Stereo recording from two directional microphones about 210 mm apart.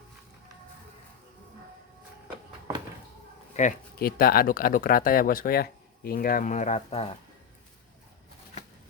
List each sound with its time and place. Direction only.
3.5 s speech: 35° left (ahead or behind)